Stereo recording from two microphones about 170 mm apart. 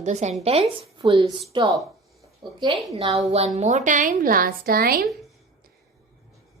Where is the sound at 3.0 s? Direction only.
35° right (ahead or behind); by 5.1 s 60° right (ahead or behind).